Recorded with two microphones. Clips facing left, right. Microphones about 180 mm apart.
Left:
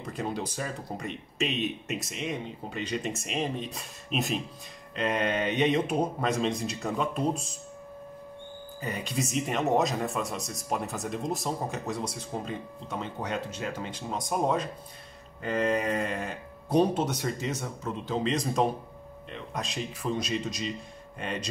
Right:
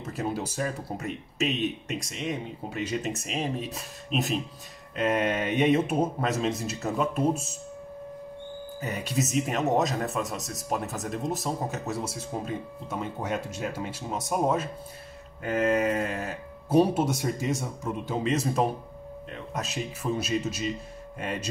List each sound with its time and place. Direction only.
0.0 s speech: 5° right (ahead or behind)
8.9 s speech: 5° right (ahead or behind)